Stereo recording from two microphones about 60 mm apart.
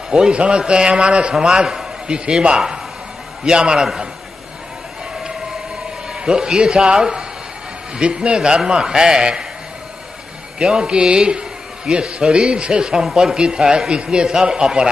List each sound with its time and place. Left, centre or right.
0.1 s a man's voice: centre
6.1 s a man's voice: centre
10.6 s a man's voice: centre